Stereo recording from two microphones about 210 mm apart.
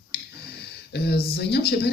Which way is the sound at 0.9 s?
50° left (ahead or behind).